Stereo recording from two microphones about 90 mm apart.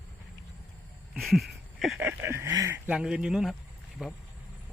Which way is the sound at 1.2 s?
Centre (ahead or behind).